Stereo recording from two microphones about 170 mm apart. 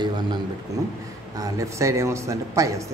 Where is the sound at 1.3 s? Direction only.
20° right (ahead or behind).